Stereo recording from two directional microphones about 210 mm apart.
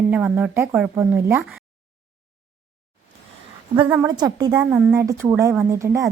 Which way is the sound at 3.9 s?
20° right (ahead or behind).